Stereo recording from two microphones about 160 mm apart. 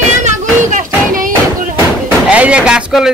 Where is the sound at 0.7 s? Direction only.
55° right (ahead or behind).